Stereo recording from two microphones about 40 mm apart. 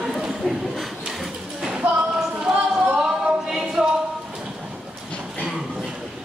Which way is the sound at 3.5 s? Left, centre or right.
Centre.